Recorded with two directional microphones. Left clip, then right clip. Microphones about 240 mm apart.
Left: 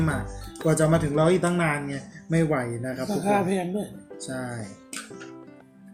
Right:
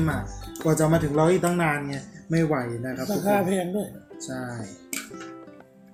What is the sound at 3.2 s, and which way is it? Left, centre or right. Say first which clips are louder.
Speech: right 1 dB; centre.